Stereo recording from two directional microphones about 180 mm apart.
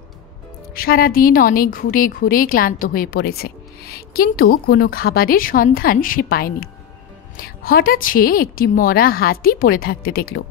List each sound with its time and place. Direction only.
0.7 s a woman's voice: 55° left (ahead or behind)